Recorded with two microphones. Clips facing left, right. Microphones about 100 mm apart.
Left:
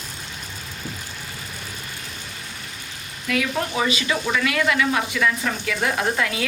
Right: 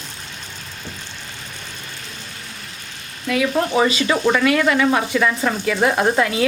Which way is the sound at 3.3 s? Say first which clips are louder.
Right 5 dB; 35° right (ahead or behind).